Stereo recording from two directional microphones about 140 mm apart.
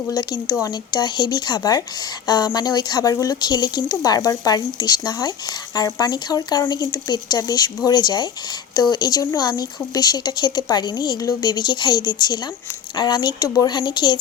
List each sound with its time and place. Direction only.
0.1 s speech: 30° left (ahead or behind)